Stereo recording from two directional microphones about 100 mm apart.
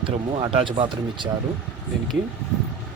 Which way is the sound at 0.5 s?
60° right (ahead or behind).